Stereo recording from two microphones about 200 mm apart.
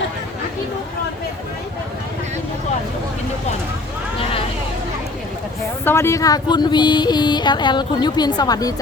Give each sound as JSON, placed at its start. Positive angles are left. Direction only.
{"t": 5.8, "sound": "speech", "side_deg": 10}